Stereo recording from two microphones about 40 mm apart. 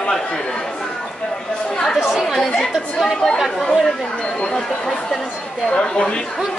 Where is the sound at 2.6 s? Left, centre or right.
Centre.